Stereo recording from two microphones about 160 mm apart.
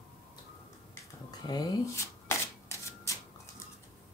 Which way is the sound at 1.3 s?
20° left (ahead or behind).